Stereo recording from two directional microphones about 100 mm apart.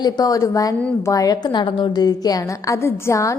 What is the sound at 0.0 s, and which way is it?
A woman's voice, 35° left (ahead or behind).